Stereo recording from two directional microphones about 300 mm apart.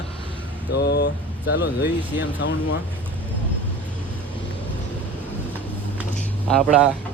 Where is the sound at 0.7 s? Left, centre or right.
Left.